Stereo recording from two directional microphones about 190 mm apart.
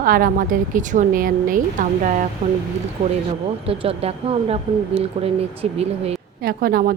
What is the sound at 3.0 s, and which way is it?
Speech, 30° right (ahead or behind).